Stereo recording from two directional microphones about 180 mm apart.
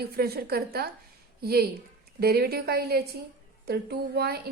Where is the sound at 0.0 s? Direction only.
60° right (ahead or behind).